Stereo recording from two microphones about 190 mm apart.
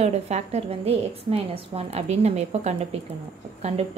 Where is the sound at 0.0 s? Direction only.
35° right (ahead or behind).